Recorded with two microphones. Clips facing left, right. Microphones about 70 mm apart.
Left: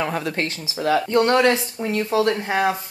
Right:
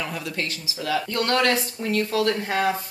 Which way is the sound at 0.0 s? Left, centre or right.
Left.